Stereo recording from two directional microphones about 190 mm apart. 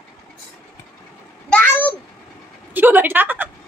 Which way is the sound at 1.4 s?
10° left (ahead or behind).